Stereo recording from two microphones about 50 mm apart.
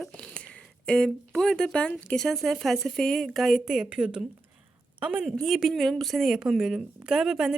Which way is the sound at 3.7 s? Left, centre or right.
Centre.